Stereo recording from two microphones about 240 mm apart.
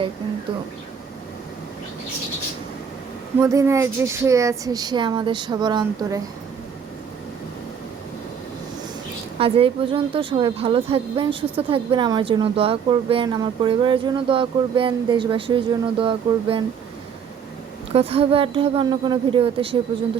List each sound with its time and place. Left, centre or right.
3.4 s speech: centre
9.4 s a woman's voice: right
17.9 s a woman's voice: right